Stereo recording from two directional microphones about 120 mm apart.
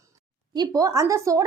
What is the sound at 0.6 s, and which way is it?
Speech, 30° right (ahead or behind).